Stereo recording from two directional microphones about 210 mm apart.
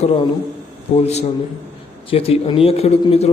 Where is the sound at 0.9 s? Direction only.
30° left (ahead or behind).